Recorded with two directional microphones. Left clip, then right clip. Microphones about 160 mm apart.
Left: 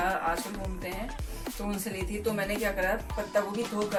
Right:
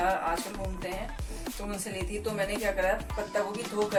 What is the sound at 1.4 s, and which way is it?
Speech, centre (ahead or behind).